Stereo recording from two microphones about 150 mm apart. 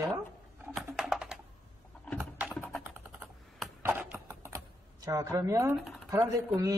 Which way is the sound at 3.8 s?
15° right (ahead or behind).